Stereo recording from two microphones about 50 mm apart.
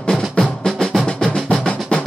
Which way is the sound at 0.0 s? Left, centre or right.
Centre.